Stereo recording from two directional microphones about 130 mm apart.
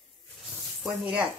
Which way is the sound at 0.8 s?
5° right (ahead or behind).